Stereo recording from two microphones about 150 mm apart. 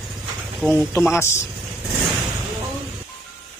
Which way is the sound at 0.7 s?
15° left (ahead or behind).